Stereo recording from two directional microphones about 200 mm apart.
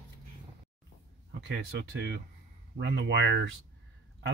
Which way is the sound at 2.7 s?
60° right (ahead or behind).